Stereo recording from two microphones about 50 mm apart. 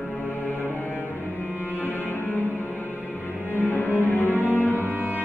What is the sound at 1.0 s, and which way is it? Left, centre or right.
Cello, left.